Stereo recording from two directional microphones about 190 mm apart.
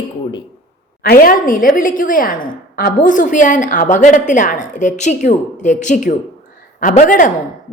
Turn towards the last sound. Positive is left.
turn(degrees=45)  # may be behind; listen again after turning